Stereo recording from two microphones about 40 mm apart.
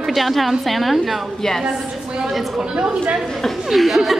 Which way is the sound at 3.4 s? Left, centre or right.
Centre.